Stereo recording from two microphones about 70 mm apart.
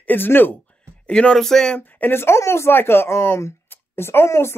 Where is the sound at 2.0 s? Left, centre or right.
Left.